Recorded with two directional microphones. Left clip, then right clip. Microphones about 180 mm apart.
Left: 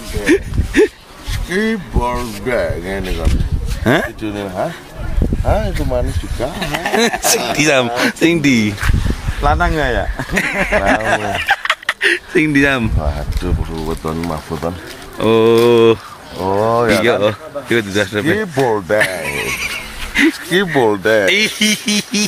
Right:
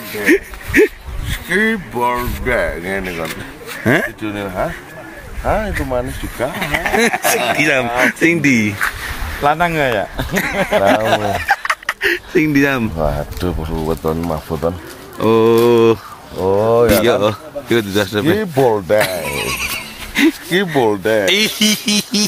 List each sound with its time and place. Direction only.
0.2 s speech: centre (ahead or behind)
6.6 s speech: 20° left (ahead or behind); by 8.9 s centre (ahead or behind)
9.4 s speech: 45° right (ahead or behind)
10.3 s speech: 5° right (ahead or behind)
10.6 s speech: 60° right (ahead or behind)
11.4 s fowl: 5° left (ahead or behind)
13.0 s speech: 65° right (ahead or behind)
15.1 s speech: 5° left (ahead or behind)
16.3 s speech: 40° right (ahead or behind)
17.0 s speech: 15° right (ahead or behind)
18.7 s speech: 50° right (ahead or behind)
20.2 s speech: 15° right (ahead or behind)
21.5 s speech: 55° right (ahead or behind)